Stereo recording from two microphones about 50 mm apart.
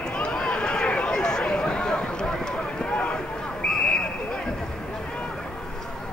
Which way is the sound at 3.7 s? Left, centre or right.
Centre.